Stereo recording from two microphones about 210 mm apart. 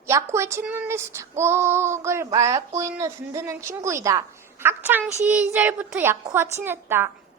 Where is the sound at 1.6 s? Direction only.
10° right (ahead or behind).